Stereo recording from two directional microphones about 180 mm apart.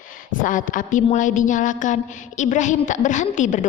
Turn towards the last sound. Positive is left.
turn(degrees=45)  # may be behind; listen again after turning